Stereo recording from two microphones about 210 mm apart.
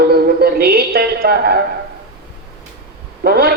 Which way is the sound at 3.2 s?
45° right (ahead or behind).